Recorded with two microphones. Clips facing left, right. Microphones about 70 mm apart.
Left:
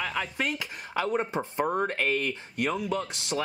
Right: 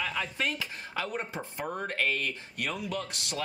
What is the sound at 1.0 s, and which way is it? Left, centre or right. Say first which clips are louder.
Speech: left 7 dB; left.